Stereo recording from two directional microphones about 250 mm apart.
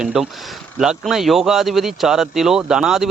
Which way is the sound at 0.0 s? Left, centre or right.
Centre.